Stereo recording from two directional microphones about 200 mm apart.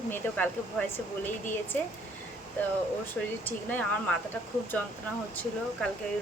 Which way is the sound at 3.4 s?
10° left (ahead or behind).